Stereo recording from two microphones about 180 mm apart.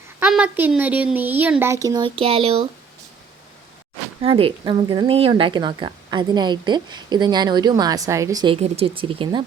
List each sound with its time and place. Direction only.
0.2 s speech: 5° right (ahead or behind); by 2.6 s 30° right (ahead or behind)
4.2 s speech: 30° right (ahead or behind)
8.5 s speech: 35° right (ahead or behind)